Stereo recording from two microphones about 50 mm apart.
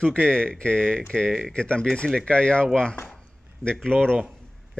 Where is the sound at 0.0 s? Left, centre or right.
Left.